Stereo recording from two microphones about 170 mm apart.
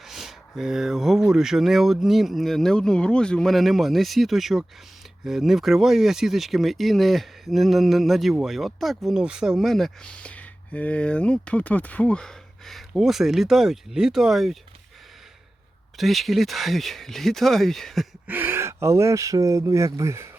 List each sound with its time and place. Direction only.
0.1 s speech: centre (ahead or behind)
16.0 s speech: centre (ahead or behind)
18.3 s speech: 10° right (ahead or behind)